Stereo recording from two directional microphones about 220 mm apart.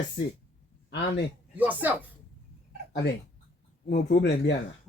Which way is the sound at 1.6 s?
5° right (ahead or behind).